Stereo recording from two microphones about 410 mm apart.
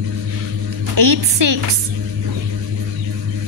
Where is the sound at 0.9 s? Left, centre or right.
Right.